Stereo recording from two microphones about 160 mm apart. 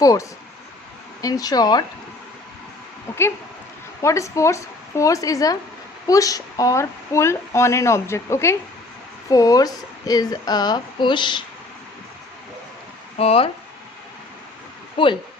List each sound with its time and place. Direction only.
0.0 s speech: 20° left (ahead or behind)
3.1 s speech: 15° left (ahead or behind); by 11.4 s 30° left (ahead or behind)
13.1 s speech: 35° left (ahead or behind)
14.9 s speech: 30° left (ahead or behind)